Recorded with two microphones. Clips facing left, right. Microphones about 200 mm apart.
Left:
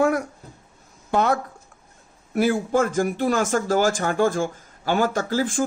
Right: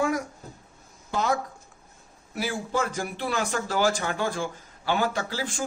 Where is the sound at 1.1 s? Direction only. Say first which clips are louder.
Left 5 dB; 60° left (ahead or behind).